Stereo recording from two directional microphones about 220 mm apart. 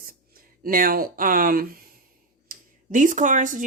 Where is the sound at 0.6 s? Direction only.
40° right (ahead or behind).